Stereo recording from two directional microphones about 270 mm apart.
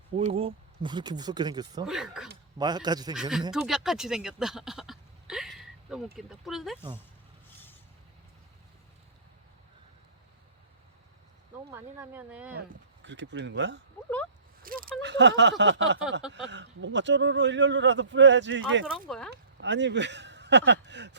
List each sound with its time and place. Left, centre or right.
0.2 s speech: right
1.8 s speech: centre
2.6 s speech: centre
3.2 s speech: centre
11.7 s speech: centre
12.5 s a man's voice: right
14.6 s a sound: right
15.0 s a man's voice: right
18.9 s speech: centre
19.3 s speech: right